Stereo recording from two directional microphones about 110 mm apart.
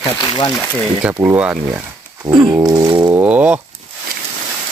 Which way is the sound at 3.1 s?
15° right (ahead or behind).